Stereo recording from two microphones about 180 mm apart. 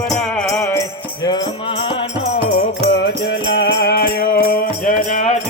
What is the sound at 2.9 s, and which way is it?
Music, 75° left (ahead or behind).